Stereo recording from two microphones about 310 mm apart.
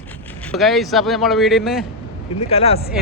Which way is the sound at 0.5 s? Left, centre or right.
Centre.